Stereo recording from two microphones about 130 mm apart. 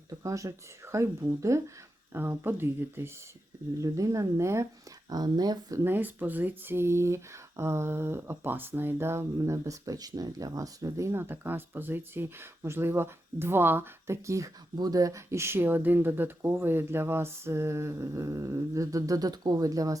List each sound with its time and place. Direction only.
0.2 s speech: 25° right (ahead or behind)
5.8 s speech: 15° right (ahead or behind)